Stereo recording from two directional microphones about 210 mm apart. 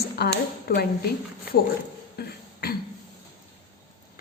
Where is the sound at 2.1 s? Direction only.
45° left (ahead or behind).